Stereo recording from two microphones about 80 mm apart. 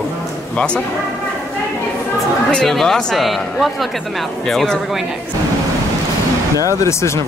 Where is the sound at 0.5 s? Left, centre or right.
Centre.